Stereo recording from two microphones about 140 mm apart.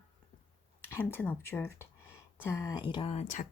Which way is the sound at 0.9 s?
15° left (ahead or behind).